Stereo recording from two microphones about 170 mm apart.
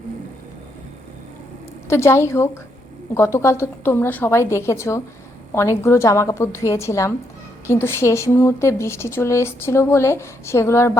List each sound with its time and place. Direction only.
1.9 s speech: 15° left (ahead or behind)